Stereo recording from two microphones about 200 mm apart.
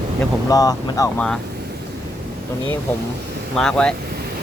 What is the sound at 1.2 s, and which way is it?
Speech, 5° left (ahead or behind).